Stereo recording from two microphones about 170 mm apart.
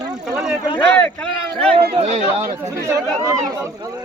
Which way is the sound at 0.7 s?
10° left (ahead or behind).